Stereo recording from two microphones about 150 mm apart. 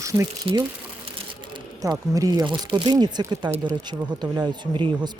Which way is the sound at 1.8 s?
25° right (ahead or behind).